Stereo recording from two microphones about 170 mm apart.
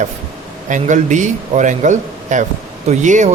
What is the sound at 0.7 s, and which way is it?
A man's voice, 45° right (ahead or behind).